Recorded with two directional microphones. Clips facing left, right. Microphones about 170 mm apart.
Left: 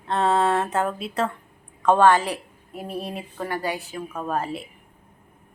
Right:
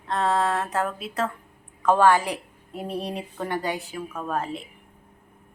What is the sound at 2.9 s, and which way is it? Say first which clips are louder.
Speech: right 1 dB; 5° left (ahead or behind).